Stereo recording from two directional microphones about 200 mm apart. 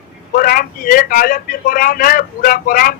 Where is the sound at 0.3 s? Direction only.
45° left (ahead or behind).